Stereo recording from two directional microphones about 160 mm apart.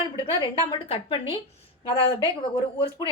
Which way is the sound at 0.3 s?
30° left (ahead or behind).